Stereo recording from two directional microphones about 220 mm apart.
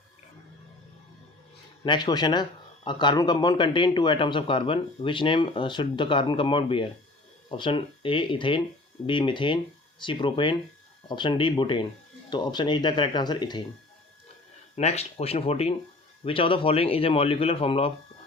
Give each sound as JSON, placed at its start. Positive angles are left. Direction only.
{"t": 1.8, "sound": "speech", "side_deg": 20}
{"t": 14.8, "sound": "speech", "side_deg": 30}